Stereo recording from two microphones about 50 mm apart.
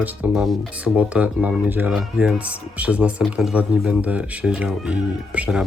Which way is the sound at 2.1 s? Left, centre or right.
Centre.